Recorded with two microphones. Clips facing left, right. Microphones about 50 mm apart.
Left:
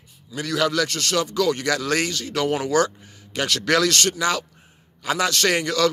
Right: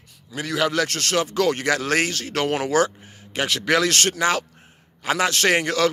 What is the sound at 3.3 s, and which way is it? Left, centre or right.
Speech, right.